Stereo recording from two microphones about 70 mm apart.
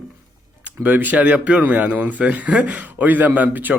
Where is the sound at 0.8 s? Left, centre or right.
Right.